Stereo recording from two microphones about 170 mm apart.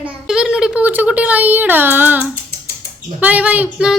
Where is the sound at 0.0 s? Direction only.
5° right (ahead or behind).